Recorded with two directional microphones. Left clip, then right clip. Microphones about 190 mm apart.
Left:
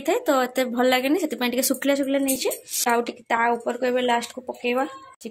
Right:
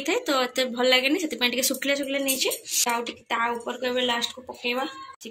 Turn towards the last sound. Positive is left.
turn(degrees=55)  # may be behind; listen again after turning